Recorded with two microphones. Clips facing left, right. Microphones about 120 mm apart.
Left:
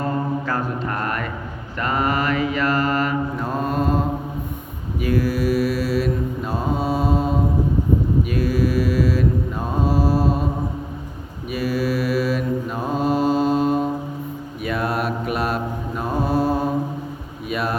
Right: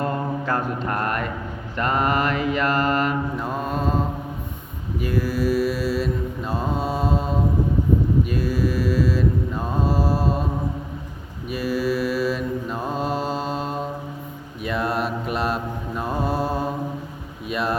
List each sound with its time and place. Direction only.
0.9 s speech: 30° right (ahead or behind)
2.0 s mantra: 45° right (ahead or behind)
3.4 s mantra: centre (ahead or behind)
8.4 s mantra: 10° left (ahead or behind)
11.5 s mantra: 5° left (ahead or behind)
17.5 s a sound: 5° left (ahead or behind)